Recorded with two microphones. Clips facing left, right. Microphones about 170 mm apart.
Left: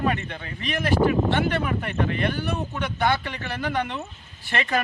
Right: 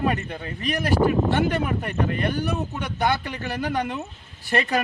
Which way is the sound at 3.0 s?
40° right (ahead or behind).